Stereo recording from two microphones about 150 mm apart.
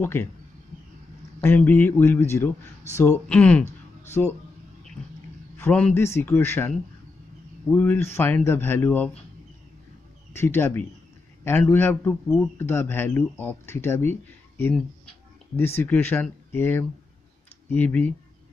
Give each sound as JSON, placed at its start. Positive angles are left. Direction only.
{"t": 0.0, "sound": "speech", "side_deg": 15}
{"t": 1.4, "sound": "speech", "side_deg": 15}
{"t": 5.6, "sound": "speech", "side_deg": 10}
{"t": 7.7, "sound": "speech", "side_deg": 10}
{"t": 10.3, "sound": "speech", "side_deg": 15}
{"t": 14.7, "sound": "a sound", "side_deg": 5}
{"t": 15.6, "sound": "speech", "side_deg": 15}